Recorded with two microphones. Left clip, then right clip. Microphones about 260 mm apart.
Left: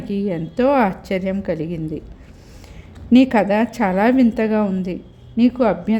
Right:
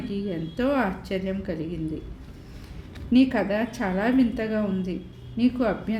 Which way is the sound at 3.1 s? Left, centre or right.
Left.